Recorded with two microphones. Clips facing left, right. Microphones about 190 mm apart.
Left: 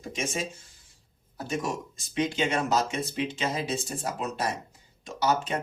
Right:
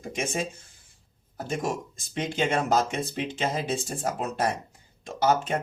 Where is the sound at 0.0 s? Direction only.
55° right (ahead or behind).